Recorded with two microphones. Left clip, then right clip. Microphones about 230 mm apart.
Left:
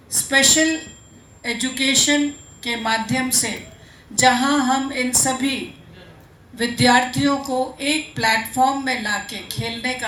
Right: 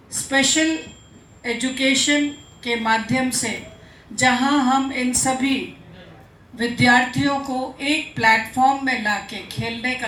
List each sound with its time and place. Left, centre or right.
0.1 s a woman's voice: left
1.4 s music: left
6.6 s music: left